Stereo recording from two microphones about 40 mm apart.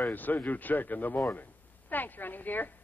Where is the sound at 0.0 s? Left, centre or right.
Left.